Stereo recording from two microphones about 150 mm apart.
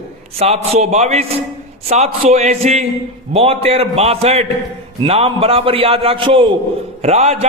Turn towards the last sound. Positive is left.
turn(degrees=-45)  # may be behind; listen again after turning